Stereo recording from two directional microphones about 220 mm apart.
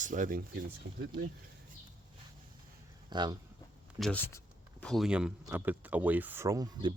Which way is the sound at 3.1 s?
20° right (ahead or behind).